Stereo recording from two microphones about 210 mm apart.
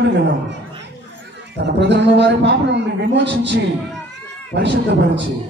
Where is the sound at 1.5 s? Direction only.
55° right (ahead or behind).